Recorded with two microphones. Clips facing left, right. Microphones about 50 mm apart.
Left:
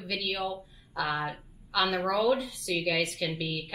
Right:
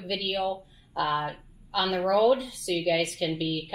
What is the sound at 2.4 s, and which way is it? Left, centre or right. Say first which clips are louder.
A woman's voice: right 2 dB; centre.